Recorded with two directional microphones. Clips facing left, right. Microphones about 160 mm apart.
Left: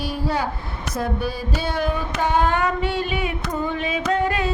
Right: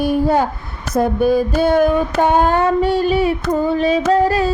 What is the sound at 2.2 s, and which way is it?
Child singing, 45° right (ahead or behind).